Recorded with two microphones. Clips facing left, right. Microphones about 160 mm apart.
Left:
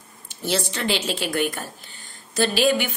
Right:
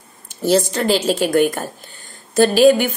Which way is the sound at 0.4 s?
45° right (ahead or behind).